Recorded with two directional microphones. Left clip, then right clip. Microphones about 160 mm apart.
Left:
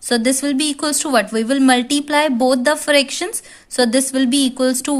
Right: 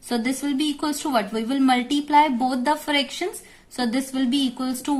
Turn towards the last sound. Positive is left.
turn(degrees=50)  # may be behind; listen again after turning